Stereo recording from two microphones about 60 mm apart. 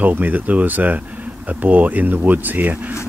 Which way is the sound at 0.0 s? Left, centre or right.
Right.